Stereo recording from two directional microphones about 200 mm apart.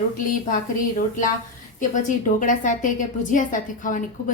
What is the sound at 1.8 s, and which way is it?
A woman's voice, 40° left (ahead or behind).